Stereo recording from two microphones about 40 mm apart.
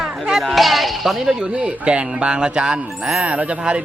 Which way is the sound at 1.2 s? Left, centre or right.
Centre.